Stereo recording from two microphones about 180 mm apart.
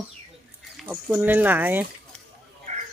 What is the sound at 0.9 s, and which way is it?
Speech, 10° right (ahead or behind).